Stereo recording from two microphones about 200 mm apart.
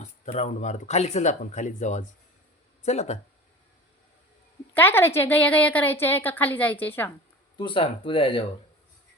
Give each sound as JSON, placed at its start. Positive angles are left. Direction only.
{"t": 0.0, "sound": "speech", "side_deg": 35}
{"t": 4.7, "sound": "a woman's voice", "side_deg": 10}
{"t": 7.6, "sound": "speech", "side_deg": 25}